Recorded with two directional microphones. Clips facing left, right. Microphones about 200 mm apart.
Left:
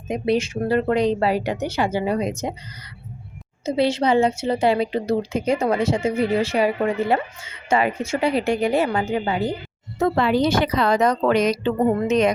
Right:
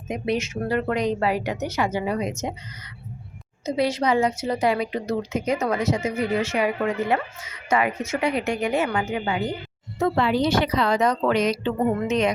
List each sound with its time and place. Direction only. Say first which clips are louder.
0.1 s a woman's voice: left 4 dB; 30° left (ahead or behind)
3.7 s a woman's voice: left 3 dB; 25° left (ahead or behind)
10.0 s a woman's voice: left 2 dB; 50° left (ahead or behind)